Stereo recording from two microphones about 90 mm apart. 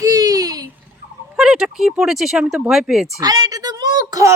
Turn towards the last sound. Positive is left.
turn(degrees=-40)  # may be behind; listen again after turning